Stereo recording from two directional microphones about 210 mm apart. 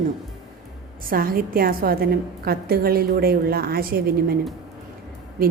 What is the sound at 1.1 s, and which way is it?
A woman's voice, 45° right (ahead or behind).